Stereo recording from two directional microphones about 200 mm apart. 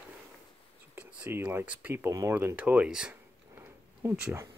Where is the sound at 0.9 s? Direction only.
10° right (ahead or behind).